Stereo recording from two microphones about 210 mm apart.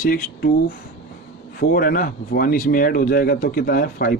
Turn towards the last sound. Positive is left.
turn(degrees=45)  # may be behind; listen again after turning